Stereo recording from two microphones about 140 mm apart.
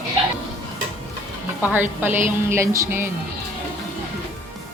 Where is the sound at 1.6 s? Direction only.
15° right (ahead or behind).